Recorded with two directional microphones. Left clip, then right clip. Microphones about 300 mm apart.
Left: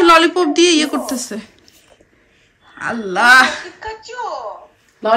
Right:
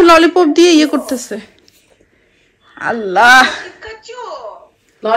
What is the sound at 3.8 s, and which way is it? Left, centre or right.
Speech, left.